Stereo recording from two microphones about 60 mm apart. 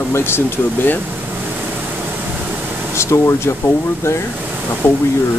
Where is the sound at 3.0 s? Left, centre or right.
Left.